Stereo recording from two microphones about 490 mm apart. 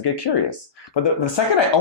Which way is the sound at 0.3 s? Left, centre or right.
Left.